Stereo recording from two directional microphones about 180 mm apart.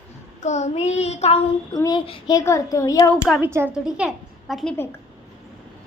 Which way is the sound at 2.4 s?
15° left (ahead or behind).